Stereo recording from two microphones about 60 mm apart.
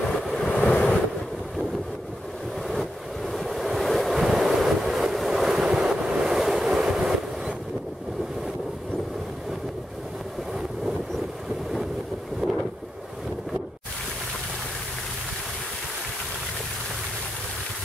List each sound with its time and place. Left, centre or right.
0.5 s vehicle: left
2.7 s waves: centre
12.4 s wind noise: centre